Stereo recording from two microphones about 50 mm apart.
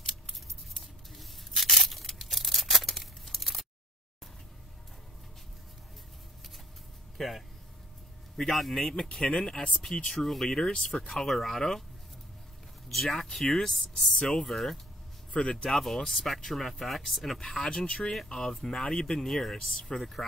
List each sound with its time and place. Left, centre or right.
1.6 s tearing: centre
7.2 s speech: centre
9.1 s speech: centre
10.1 s speech: centre
12.9 s speech: centre
14.1 s speech: centre
15.3 s speech: centre
15.7 s speech: centre
17.6 s speech: centre
18.1 s speech: centre